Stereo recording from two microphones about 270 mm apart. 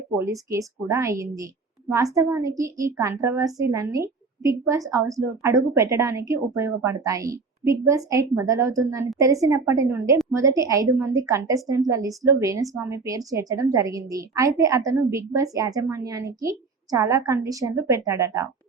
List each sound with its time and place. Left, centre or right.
0.2 s a woman's voice: centre